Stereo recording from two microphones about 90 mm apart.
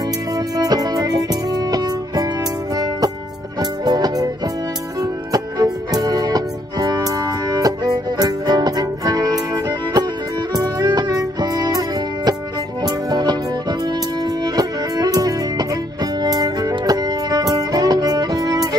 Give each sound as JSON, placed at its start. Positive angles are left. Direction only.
{"t": 0.6, "sound": "music", "side_deg": -45}
{"t": 12.8, "sound": "music", "side_deg": -50}